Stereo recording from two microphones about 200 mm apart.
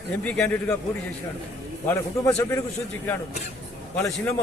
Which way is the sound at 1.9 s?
15° left (ahead or behind).